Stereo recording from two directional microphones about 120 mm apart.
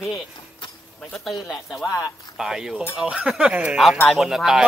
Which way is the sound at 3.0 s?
10° right (ahead or behind).